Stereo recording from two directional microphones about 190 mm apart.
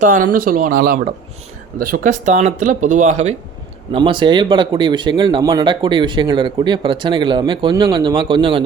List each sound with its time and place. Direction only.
0.0 s speech: 45° right (ahead or behind)
3.9 s speech: 25° right (ahead or behind)